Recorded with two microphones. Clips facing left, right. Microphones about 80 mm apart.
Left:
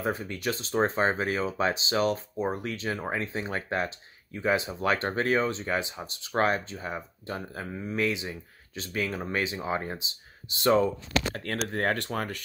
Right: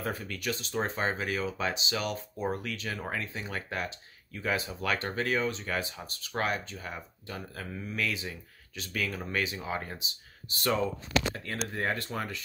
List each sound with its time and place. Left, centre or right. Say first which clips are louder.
0.0 s speech: left 4 dB; left
6.3 s speech: left 6 dB; left
10.8 s speech: left 3 dB; left